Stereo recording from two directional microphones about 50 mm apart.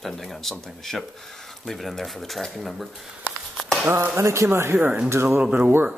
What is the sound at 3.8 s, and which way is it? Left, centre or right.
Speech, right.